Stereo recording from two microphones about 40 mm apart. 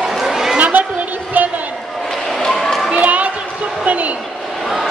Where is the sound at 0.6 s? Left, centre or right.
Right.